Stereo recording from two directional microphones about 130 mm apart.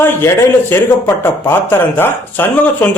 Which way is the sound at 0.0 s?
15° left (ahead or behind).